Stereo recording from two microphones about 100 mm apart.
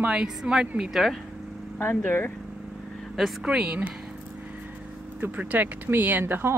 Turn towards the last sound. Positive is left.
turn(degrees=-25)  # may be behind; listen again after turning